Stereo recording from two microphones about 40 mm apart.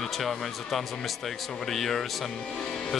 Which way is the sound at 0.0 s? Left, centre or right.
Centre.